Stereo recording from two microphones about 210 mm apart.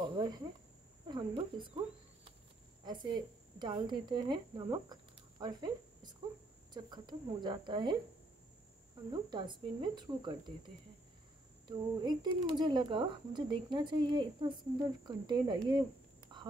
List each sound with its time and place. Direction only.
0.0 s cricket: 20° right (ahead or behind)
1.0 s speech: 20° right (ahead or behind)
2.8 s a woman's voice: 20° right (ahead or behind)
9.1 s speech: 20° right (ahead or behind)
16.3 s a sound: 20° right (ahead or behind)